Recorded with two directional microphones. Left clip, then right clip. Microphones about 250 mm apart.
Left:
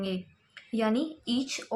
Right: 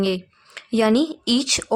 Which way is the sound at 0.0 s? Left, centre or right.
Right.